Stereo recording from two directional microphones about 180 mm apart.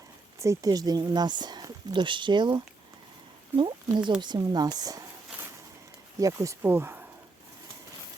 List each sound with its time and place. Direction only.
0.3 s speech: 15° right (ahead or behind)
6.1 s speech: 20° right (ahead or behind)